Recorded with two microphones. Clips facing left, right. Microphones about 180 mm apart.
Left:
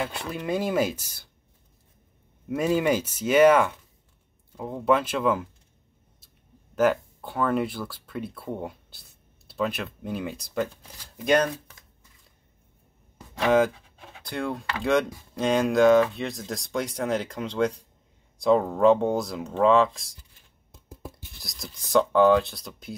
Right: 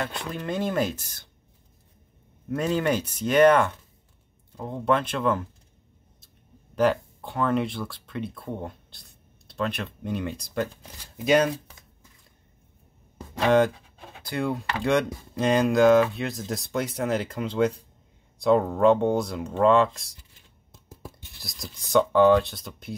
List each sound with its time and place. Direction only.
0.0 s speech: 5° left (ahead or behind)
2.4 s speech: 10° left (ahead or behind)
6.7 s speech: 5° left (ahead or behind)
14.2 s speech: centre (ahead or behind)
21.4 s speech: centre (ahead or behind)